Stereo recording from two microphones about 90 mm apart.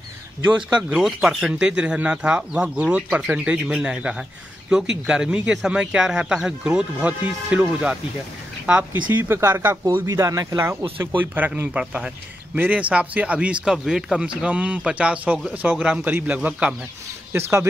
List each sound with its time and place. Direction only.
0.5 s speech: 15° right (ahead or behind)
1.0 s speech: 5° right (ahead or behind)
8.7 s speech: 25° right (ahead or behind)
10.0 s speech: 40° right (ahead or behind)
11.1 s speech: 20° right (ahead or behind)
17.3 s speech: 30° right (ahead or behind)